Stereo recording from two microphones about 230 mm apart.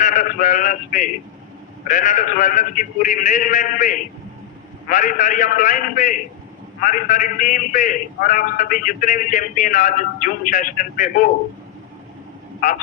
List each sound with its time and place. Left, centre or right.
0.0 s a man's voice: left